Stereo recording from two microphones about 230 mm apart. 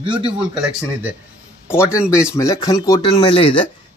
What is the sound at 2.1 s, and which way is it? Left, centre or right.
Speech, centre.